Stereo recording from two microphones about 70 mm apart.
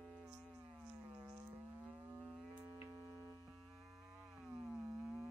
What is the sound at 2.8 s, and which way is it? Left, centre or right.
Tick-tock, right.